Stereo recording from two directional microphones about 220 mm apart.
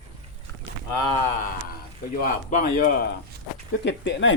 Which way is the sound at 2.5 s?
35° left (ahead or behind).